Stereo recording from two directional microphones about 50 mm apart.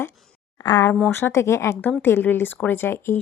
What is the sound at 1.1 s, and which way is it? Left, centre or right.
Speech, left.